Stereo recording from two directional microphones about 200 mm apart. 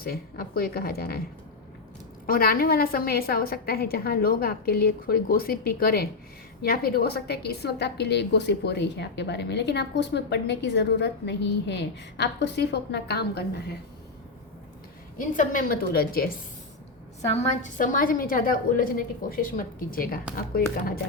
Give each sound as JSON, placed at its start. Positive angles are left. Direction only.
{"t": 0.0, "sound": "a woman's voice", "side_deg": 50}
{"t": 2.2, "sound": "a woman's voice", "side_deg": 45}
{"t": 15.2, "sound": "a woman's voice", "side_deg": 40}
{"t": 17.2, "sound": "a woman's voice", "side_deg": 35}